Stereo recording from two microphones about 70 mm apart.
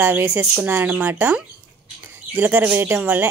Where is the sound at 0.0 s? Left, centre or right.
Right.